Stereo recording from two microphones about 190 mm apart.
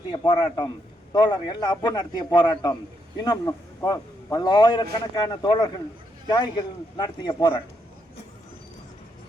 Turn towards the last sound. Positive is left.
turn(degrees=25)  # may be behind; listen again after turning